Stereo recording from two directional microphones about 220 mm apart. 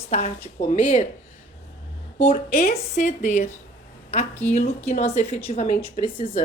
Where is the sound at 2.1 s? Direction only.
30° left (ahead or behind).